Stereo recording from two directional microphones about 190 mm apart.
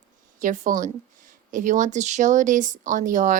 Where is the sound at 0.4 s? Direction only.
45° right (ahead or behind).